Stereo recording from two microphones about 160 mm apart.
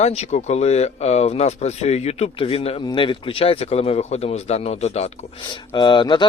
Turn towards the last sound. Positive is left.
turn(degrees=30)  # may be behind; listen again after turning